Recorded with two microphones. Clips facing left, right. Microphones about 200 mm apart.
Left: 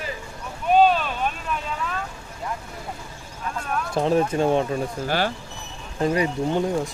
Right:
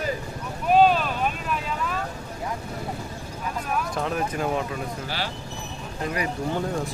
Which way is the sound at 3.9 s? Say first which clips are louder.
Left 6 dB; 30° left (ahead or behind).